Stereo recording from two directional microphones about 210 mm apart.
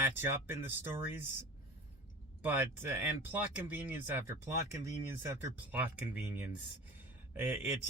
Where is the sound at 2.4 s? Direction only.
10° right (ahead or behind).